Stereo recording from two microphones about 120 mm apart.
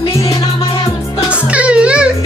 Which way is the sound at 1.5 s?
10° right (ahead or behind).